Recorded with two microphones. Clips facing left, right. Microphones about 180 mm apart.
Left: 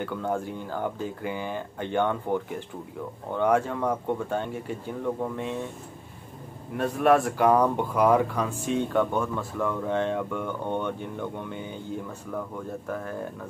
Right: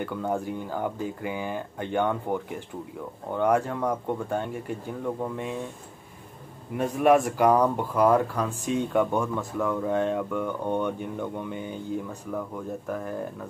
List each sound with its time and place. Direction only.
0.0 s speech: 5° right (ahead or behind)
6.8 s speech: 5° right (ahead or behind)
7.9 s speech: 5° left (ahead or behind)
8.3 s speech: 10° right (ahead or behind)
9.6 s speech: 5° right (ahead or behind)
12.8 s speech: 5° right (ahead or behind)